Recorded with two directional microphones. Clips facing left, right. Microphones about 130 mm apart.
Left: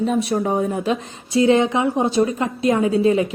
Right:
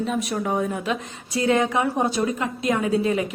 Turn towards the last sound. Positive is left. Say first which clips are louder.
# left 5 dB
turn(degrees=30)  # may be behind; listen again after turning